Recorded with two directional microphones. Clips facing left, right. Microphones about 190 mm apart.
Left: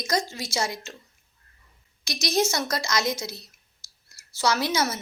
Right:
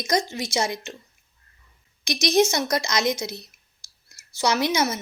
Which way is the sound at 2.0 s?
15° right (ahead or behind).